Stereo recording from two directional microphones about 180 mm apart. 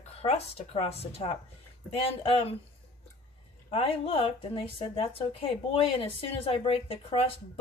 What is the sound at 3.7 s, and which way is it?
Speech, 30° left (ahead or behind).